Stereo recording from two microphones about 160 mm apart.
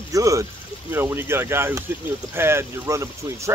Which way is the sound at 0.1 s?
20° right (ahead or behind).